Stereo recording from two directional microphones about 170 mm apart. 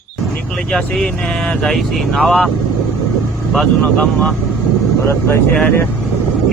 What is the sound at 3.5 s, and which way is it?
Speech, centre (ahead or behind).